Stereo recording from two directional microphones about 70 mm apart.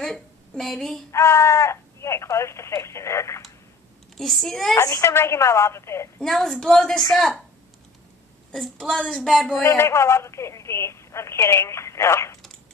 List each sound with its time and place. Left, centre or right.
0.0 s a woman's voice: centre
1.1 s speech: left
4.2 s a woman's voice: centre
4.7 s speech: left
6.3 s a woman's voice: centre
8.5 s a woman's voice: centre
9.6 s speech: left